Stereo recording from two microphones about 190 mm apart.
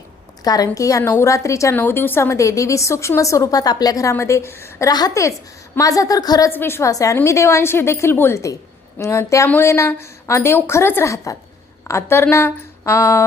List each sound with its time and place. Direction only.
0.4 s a woman's voice: 20° left (ahead or behind)